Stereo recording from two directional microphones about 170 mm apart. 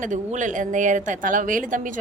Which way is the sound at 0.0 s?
45° right (ahead or behind).